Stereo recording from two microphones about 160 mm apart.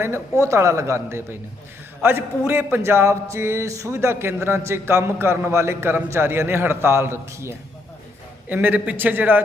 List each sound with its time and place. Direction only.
0.0 s a man's voice: 15° right (ahead or behind)